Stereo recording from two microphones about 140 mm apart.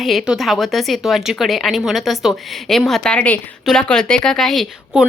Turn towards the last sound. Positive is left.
turn(degrees=0)  # may be behind; listen again after turning